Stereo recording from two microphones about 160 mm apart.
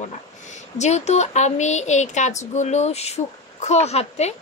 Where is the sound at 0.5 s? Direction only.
45° left (ahead or behind).